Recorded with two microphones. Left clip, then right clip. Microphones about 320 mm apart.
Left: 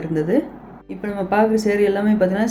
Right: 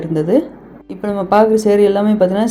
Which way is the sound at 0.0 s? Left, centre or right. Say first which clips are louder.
Right 5 dB; centre.